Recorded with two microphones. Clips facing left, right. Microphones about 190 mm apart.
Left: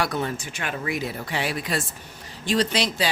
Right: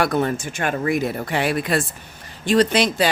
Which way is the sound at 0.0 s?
55° right (ahead or behind).